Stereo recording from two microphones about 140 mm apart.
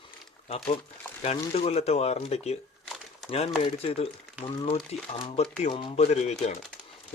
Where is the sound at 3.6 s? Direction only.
45° left (ahead or behind).